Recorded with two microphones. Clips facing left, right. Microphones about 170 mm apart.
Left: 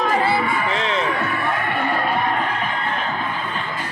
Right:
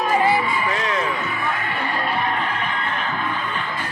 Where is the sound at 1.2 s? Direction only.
60° left (ahead or behind).